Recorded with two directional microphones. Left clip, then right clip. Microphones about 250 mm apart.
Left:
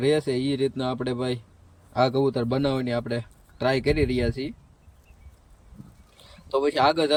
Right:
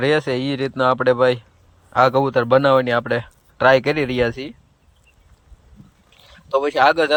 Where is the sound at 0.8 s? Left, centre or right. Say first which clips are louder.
Right 13 dB; right.